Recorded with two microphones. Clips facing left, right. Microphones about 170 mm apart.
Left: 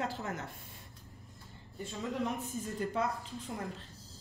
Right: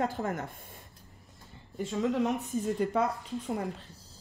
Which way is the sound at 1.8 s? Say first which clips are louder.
Right 8 dB; 80° right.